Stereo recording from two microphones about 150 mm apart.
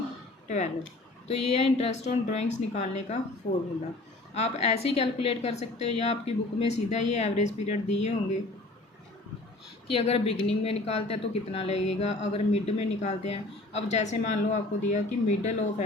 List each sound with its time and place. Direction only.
0.4 s a sound: 50° left (ahead or behind)
1.5 s speech: 40° left (ahead or behind)
4.4 s speech: 45° left (ahead or behind)
9.9 s speech: 40° left (ahead or behind)